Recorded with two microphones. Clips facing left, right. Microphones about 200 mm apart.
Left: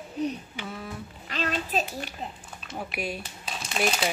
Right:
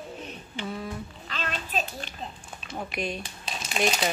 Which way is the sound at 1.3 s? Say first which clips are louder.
Left 4 dB; 35° left (ahead or behind).